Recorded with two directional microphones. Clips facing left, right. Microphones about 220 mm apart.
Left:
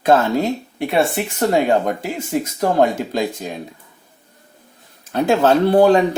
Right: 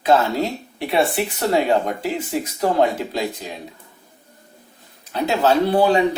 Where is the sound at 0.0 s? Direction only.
50° left (ahead or behind).